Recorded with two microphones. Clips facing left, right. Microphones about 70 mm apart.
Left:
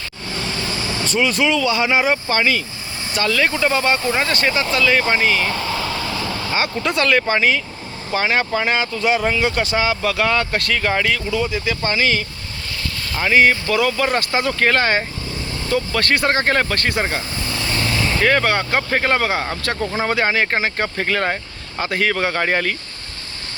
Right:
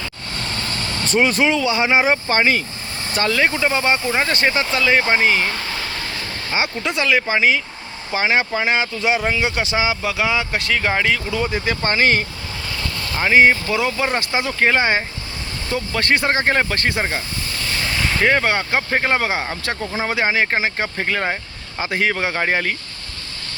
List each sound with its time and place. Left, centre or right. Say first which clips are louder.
0.3 s speech: left 2 dB; right
6.5 s speech: even; centre
11.3 s speech: even; right
13.1 s speech: right 1 dB; right
17.0 s speech: left 1 dB; centre
18.2 s speech: even; centre